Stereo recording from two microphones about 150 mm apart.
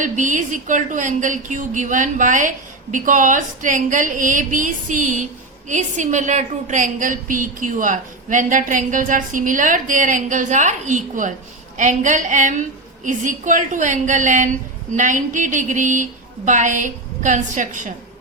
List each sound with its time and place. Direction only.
0.0 s a woman's voice: 55° right (ahead or behind)